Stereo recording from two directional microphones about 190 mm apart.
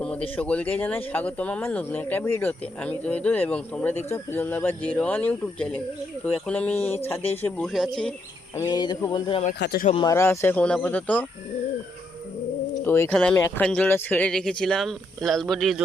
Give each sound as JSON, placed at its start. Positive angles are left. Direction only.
{"t": 0.0, "sound": "speech", "side_deg": 5}
{"t": 9.6, "sound": "speech", "side_deg": 60}
{"t": 10.0, "sound": "speech", "side_deg": 15}
{"t": 12.8, "sound": "speech", "side_deg": 10}